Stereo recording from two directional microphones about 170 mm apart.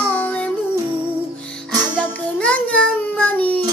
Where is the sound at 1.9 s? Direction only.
5° left (ahead or behind).